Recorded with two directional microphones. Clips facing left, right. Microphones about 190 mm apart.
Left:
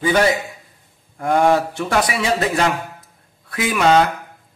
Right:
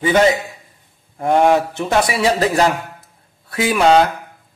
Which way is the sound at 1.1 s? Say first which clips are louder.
Right 2 dB; 25° right (ahead or behind).